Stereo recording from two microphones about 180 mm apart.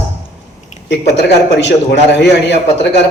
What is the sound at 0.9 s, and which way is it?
A man's voice, 70° left (ahead or behind).